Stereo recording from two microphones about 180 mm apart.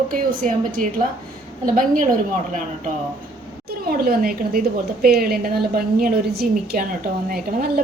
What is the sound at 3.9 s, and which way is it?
A woman's voice, 55° right (ahead or behind).